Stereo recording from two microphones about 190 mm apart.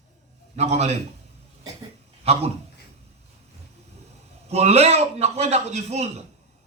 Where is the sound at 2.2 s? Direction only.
30° right (ahead or behind).